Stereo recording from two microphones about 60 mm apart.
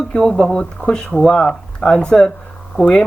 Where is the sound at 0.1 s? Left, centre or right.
Centre.